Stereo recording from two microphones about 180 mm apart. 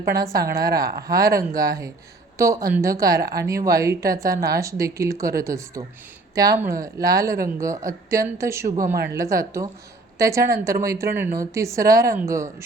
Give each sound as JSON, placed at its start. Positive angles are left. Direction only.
{"t": 0.3, "sound": "speech", "side_deg": -20}
{"t": 8.8, "sound": "speech", "side_deg": -55}
{"t": 9.1, "sound": "speech", "side_deg": -15}